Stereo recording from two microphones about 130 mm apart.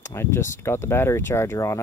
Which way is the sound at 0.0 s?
20° left (ahead or behind).